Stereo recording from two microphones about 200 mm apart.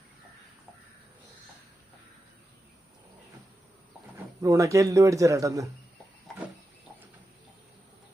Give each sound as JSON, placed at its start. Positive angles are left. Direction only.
{"t": 4.4, "sound": "a man's voice", "side_deg": -15}